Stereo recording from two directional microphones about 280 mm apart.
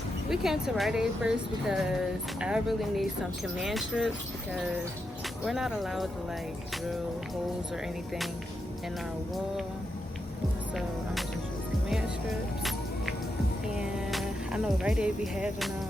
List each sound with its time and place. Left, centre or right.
0.3 s speech: centre
5.5 s speech: centre
10.8 s speech: centre
11.9 s music: centre